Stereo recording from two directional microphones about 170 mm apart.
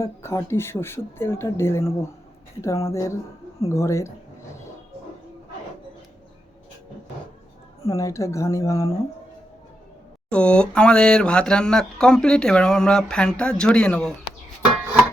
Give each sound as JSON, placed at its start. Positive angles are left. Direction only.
{"t": 0.0, "sound": "speech", "side_deg": 15}
{"t": 7.9, "sound": "speech", "side_deg": 20}
{"t": 10.2, "sound": "a sound", "side_deg": 5}